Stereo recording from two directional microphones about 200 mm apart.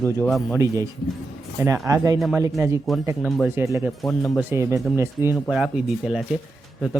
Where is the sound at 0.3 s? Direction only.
Centre (ahead or behind).